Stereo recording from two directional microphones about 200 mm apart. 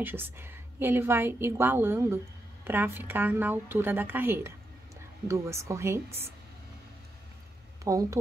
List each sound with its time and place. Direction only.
0.0 s a woman's voice: 10° right (ahead or behind)
7.8 s a woman's voice: 15° right (ahead or behind)